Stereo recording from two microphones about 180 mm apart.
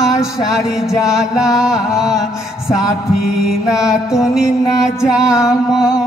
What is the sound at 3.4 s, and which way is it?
Chant, 5° right (ahead or behind).